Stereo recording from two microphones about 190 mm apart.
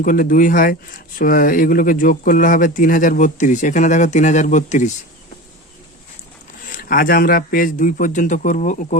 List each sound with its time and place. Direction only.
0.0 s speech: 45° left (ahead or behind)
6.7 s speech: 45° left (ahead or behind)